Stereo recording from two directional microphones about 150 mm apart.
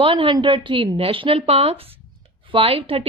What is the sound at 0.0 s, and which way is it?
A woman's voice, 35° right (ahead or behind).